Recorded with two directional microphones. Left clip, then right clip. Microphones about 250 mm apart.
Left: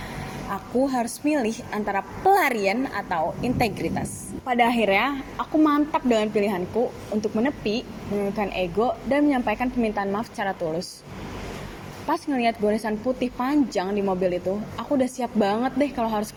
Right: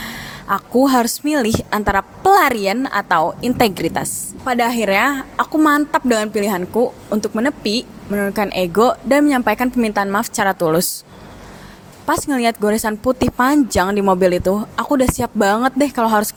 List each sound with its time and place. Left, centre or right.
0.5 s a woman's voice: right
4.4 s a woman's voice: right
12.0 s a woman's voice: right